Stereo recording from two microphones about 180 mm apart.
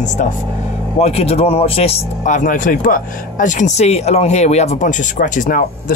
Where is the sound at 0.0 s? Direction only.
45° left (ahead or behind).